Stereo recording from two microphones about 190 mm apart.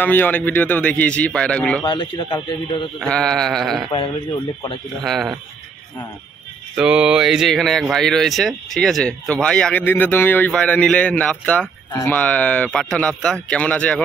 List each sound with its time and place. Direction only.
0.0 s speech: 10° left (ahead or behind)
1.9 s speech: 25° left (ahead or behind)
3.0 s speech: 5° left (ahead or behind)
5.0 s speech: centre (ahead or behind)
6.7 s speech: 5° right (ahead or behind)